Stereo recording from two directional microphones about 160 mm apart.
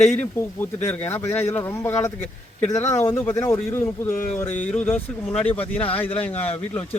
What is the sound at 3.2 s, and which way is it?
Speech, 15° left (ahead or behind).